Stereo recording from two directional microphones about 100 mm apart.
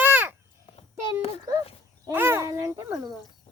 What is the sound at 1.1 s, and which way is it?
Speech, 75° left (ahead or behind).